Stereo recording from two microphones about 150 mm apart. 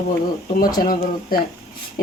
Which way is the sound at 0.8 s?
70° left (ahead or behind).